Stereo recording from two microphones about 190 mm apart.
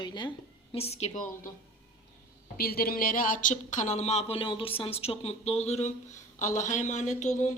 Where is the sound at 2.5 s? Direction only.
55° left (ahead or behind).